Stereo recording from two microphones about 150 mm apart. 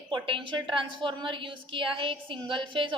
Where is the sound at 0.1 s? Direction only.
35° right (ahead or behind).